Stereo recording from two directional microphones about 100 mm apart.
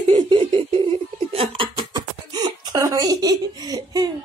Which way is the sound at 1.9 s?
45° right (ahead or behind).